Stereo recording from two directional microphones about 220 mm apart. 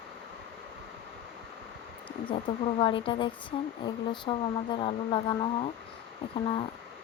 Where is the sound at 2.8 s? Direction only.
20° left (ahead or behind).